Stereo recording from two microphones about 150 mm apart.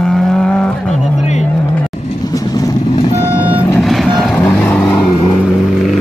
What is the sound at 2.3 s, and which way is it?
Vehicle, 25° left (ahead or behind).